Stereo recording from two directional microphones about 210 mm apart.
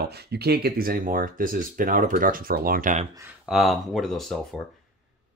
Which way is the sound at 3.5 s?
Centre (ahead or behind).